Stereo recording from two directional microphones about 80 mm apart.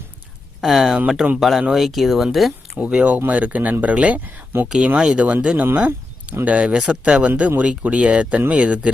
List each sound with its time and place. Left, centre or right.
0.6 s speech: centre
2.7 s speech: centre